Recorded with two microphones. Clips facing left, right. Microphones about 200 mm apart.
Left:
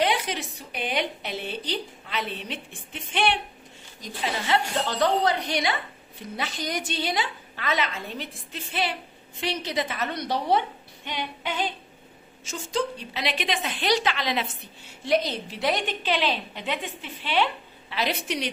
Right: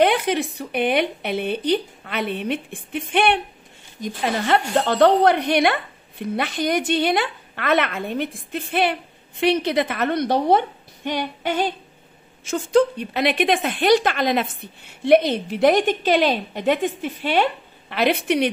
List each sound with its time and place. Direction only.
0.0 s a woman's voice: 55° right (ahead or behind)
12.4 s a woman's voice: 55° right (ahead or behind)